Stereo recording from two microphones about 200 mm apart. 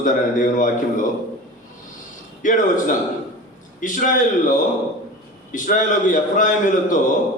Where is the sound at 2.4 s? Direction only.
40° left (ahead or behind).